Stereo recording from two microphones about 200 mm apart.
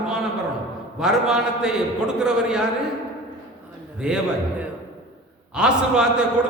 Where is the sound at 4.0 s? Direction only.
5° right (ahead or behind).